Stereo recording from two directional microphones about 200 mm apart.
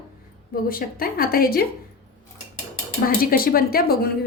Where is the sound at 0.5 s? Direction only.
45° left (ahead or behind).